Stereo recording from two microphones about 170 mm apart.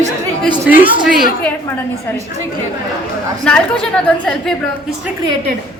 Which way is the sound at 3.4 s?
5° left (ahead or behind).